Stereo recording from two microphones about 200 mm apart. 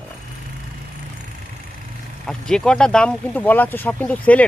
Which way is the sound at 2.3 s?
5° left (ahead or behind).